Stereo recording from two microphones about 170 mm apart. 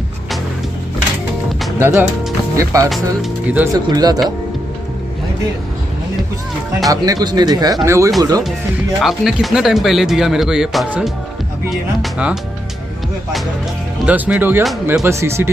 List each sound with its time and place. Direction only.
1.8 s speech: 15° right (ahead or behind)
2.9 s speech: 5° right (ahead or behind)
3.7 s speech: 20° right (ahead or behind)
6.9 s speech: 20° right (ahead or behind)
9.0 s speech: centre (ahead or behind)
14.0 s speech: 10° right (ahead or behind)